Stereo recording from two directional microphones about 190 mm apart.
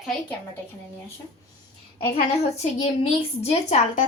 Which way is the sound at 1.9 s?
30° left (ahead or behind).